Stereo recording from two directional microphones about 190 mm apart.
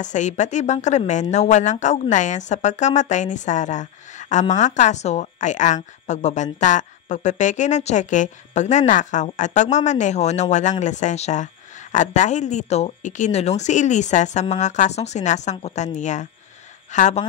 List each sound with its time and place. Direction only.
0.0 s a woman's voice: 40° left (ahead or behind)